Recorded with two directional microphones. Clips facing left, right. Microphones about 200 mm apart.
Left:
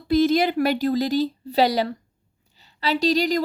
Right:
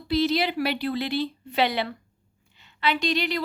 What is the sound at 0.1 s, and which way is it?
A woman's voice, 50° left (ahead or behind).